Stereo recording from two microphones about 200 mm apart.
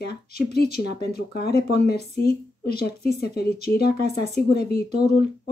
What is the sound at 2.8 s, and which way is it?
Speech, 50° left (ahead or behind).